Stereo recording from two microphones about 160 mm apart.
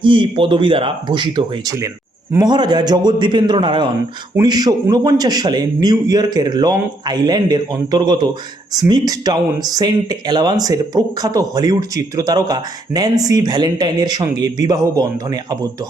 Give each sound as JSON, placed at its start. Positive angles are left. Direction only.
{"t": 0.0, "sound": "speech", "side_deg": -30}